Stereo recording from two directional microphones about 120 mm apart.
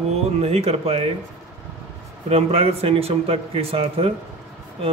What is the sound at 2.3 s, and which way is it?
A man's voice, 55° right (ahead or behind).